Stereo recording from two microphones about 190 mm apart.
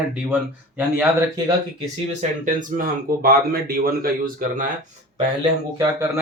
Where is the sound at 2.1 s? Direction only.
40° right (ahead or behind).